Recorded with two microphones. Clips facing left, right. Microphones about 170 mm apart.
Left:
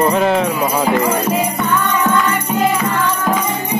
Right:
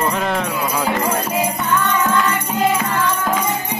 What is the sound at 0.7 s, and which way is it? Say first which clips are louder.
Music: left 2 dB; 30° left (ahead or behind).